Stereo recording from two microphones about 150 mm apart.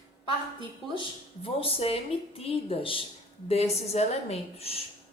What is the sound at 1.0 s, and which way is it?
A woman's voice, 40° left (ahead or behind).